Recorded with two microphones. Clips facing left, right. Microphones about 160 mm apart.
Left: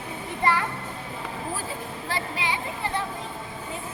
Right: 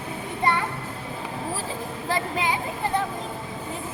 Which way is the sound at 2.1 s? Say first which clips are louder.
Right 4 dB; 45° right (ahead or behind).